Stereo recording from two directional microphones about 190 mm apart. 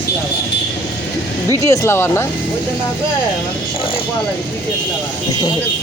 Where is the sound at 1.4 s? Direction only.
15° left (ahead or behind).